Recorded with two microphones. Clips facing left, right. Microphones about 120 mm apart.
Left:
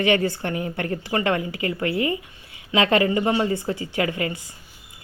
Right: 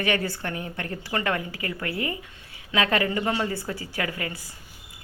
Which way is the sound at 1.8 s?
45° right (ahead or behind).